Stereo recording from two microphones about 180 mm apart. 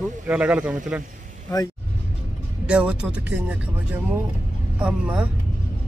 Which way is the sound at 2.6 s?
5° right (ahead or behind).